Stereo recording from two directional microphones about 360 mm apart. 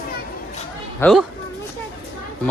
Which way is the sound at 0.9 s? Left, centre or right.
Centre.